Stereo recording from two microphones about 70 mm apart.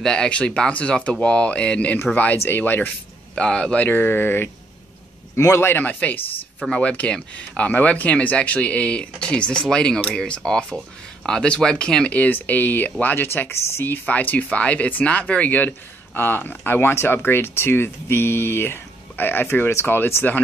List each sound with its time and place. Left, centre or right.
0.0 s speech: centre
2.3 s speech: left
3.3 s speech: centre; by 4.5 s left
5.6 s speech: left